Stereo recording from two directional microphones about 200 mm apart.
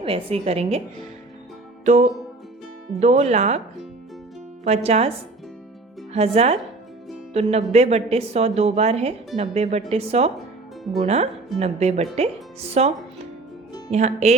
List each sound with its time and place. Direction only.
0.0 s a woman's voice: 30° right (ahead or behind)
1.8 s a woman's voice: 35° right (ahead or behind)
4.6 s a woman's voice: 30° right (ahead or behind)
6.1 s a woman's voice: 30° right (ahead or behind)
13.9 s a woman's voice: 35° right (ahead or behind)